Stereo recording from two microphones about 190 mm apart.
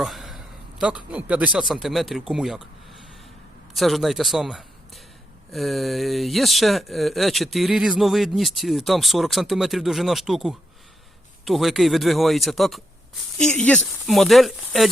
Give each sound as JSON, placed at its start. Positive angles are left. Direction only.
{"t": 0.0, "sound": "a man's voice", "side_deg": 0}